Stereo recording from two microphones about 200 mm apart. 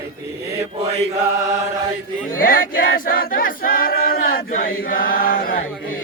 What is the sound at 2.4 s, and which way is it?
Choir, 45° left (ahead or behind).